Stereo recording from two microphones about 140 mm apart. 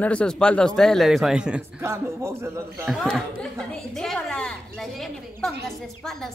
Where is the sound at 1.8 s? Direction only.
20° right (ahead or behind).